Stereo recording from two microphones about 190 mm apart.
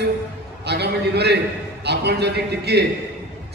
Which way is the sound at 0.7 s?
60° right (ahead or behind).